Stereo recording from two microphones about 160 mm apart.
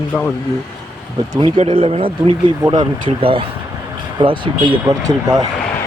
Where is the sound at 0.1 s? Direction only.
Centre (ahead or behind).